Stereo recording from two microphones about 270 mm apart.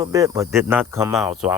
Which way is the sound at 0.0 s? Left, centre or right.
Centre.